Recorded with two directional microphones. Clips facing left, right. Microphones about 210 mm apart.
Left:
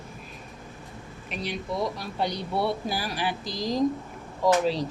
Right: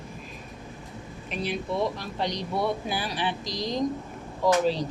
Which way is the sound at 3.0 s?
30° right (ahead or behind).